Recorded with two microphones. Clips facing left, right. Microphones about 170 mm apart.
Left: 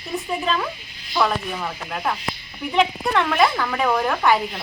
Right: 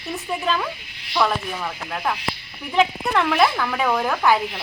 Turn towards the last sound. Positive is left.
turn(degrees=0)  # may be behind; listen again after turning